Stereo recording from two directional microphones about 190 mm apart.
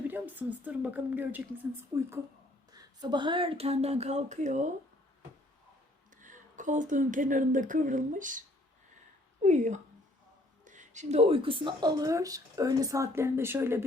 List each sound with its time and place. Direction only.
0.1 s a woman's voice: 10° right (ahead or behind)
2.7 s speech: 25° right (ahead or behind); by 4.7 s 40° right (ahead or behind)
6.1 s speech: 45° right (ahead or behind); by 13.8 s 15° right (ahead or behind)